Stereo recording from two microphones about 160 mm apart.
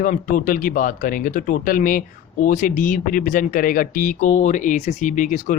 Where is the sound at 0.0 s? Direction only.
55° left (ahead or behind).